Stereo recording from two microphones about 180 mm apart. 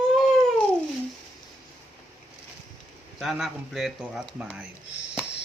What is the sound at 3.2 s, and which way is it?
Speech, centre (ahead or behind).